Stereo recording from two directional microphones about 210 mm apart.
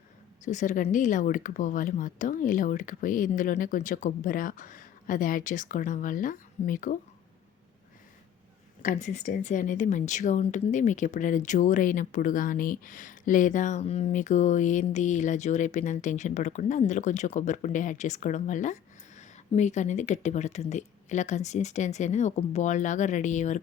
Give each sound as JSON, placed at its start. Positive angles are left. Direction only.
{"t": 0.4, "sound": "speech", "side_deg": 35}
{"t": 8.8, "sound": "speech", "side_deg": 35}